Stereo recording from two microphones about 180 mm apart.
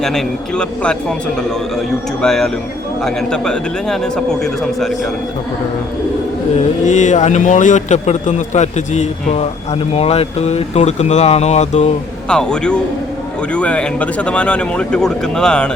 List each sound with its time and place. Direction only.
0.0 s speech: centre (ahead or behind)
6.8 s a man's voice: 40° left (ahead or behind)
12.3 s speech: 5° left (ahead or behind)